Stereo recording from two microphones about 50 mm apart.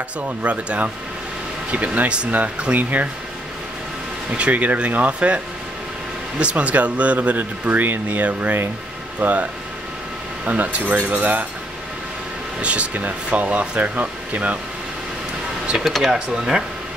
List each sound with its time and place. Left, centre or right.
0.4 s speech: right
4.3 s speech: right
12.6 s speech: right
15.8 s speech: centre
16.1 s speech: centre